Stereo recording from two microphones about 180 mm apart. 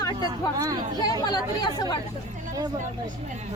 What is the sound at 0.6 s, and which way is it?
Speech, 20° right (ahead or behind).